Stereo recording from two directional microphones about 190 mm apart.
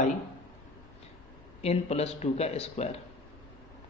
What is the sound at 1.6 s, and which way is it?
A man's voice, 35° left (ahead or behind).